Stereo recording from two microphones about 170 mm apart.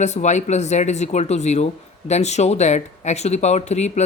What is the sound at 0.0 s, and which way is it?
Speech, 45° left (ahead or behind).